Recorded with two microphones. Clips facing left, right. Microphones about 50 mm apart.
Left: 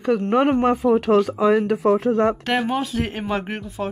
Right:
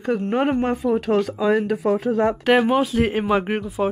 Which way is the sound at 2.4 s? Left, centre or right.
Centre.